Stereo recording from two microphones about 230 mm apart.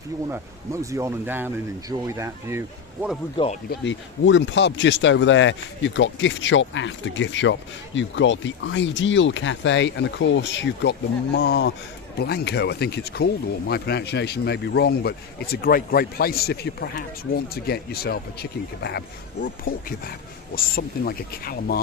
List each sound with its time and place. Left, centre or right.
0.3 s speech: centre
3.3 s speech: left
3.7 s a man's voice: left